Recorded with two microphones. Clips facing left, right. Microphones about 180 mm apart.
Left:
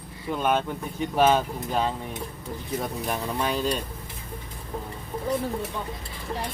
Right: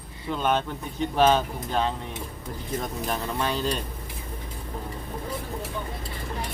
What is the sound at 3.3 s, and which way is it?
Speech, 5° left (ahead or behind).